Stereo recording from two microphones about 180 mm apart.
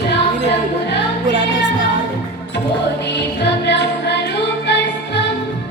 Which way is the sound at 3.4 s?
75° left (ahead or behind).